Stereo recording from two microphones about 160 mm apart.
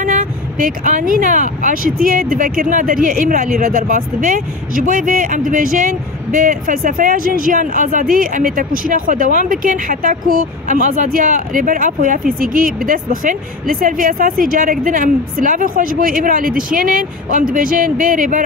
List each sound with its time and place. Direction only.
0.0 s speech: 55° right (ahead or behind)